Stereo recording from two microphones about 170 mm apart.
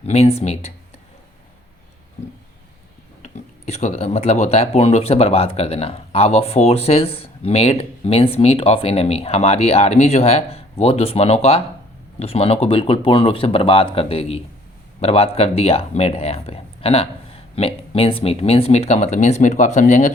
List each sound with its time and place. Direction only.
0.0 s speech: 35° left (ahead or behind)
3.2 s speech: 40° left (ahead or behind)